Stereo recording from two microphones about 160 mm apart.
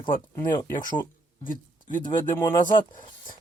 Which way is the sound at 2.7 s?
55° left (ahead or behind).